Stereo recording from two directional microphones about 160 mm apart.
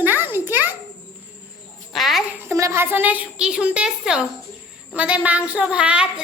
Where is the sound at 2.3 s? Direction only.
20° right (ahead or behind).